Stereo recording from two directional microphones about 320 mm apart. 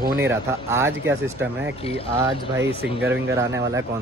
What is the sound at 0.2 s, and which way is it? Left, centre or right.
Speech, centre.